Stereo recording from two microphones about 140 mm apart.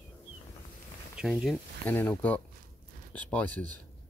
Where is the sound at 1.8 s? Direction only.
10° left (ahead or behind).